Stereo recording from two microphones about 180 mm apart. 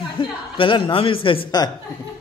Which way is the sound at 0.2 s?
25° left (ahead or behind).